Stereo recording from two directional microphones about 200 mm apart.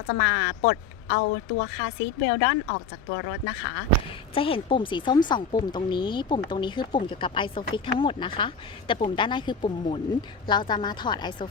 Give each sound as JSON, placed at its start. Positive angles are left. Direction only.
{"t": 0.1, "sound": "speech", "side_deg": 65}
{"t": 4.4, "sound": "speech", "side_deg": 25}